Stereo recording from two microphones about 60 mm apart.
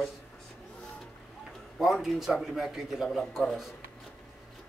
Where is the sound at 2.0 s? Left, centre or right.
Centre.